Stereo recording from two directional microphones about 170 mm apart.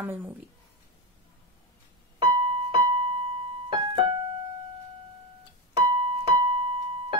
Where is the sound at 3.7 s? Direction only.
35° right (ahead or behind).